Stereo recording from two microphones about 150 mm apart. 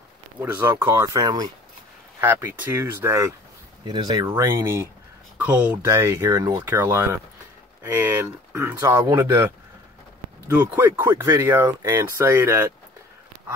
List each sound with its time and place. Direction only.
0.4 s speech: 15° right (ahead or behind)
2.1 s speech: 15° right (ahead or behind)
10.6 s speech: 10° right (ahead or behind)